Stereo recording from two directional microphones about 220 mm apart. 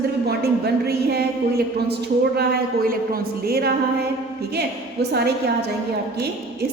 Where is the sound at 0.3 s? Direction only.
45° right (ahead or behind).